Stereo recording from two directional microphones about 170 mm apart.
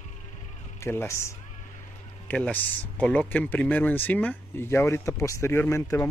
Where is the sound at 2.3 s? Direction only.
5° left (ahead or behind).